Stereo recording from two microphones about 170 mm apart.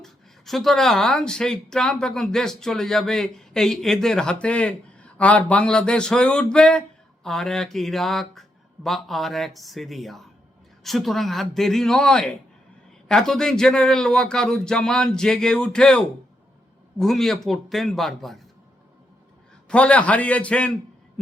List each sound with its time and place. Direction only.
0.0 s speech: centre (ahead or behind)
19.6 s a man's voice: 5° left (ahead or behind)